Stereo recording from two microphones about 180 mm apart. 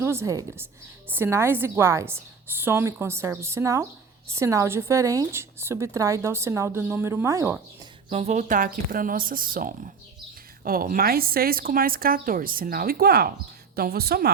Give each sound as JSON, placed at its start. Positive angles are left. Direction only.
{"t": 0.0, "sound": "speech", "side_deg": -15}
{"t": 8.1, "sound": "speech", "side_deg": -40}